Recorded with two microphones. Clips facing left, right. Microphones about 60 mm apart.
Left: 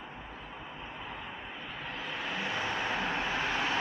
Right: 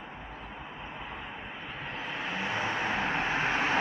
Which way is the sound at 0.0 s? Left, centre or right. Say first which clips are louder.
Right 2 dB; centre.